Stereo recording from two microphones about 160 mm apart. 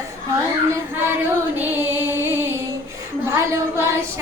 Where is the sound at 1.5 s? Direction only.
10° right (ahead or behind).